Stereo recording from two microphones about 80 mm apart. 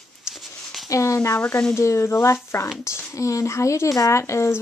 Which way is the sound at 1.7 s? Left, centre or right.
Left.